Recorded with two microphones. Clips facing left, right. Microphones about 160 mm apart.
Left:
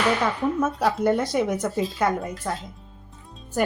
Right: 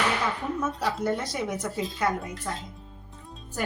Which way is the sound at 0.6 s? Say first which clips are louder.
Left 6 dB; 55° left (ahead or behind).